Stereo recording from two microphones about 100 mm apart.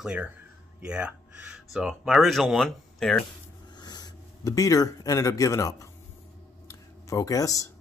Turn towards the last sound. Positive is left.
turn(degrees=35)  # may be behind; listen again after turning